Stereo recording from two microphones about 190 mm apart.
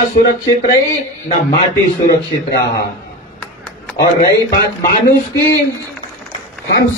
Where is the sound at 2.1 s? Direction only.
55° left (ahead or behind).